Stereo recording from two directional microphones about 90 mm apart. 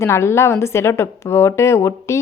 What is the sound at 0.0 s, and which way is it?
A woman's voice, 30° left (ahead or behind).